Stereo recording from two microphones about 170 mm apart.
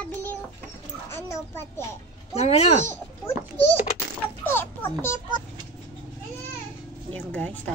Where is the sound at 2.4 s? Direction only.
40° left (ahead or behind).